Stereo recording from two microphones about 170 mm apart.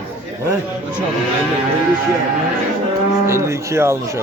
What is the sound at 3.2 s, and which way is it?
Speech, 15° right (ahead or behind).